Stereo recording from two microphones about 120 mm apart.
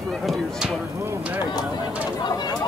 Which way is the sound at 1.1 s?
15° right (ahead or behind).